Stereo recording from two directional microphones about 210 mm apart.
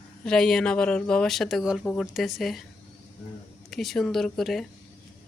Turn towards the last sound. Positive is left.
turn(degrees=0)  # may be behind; listen again after turning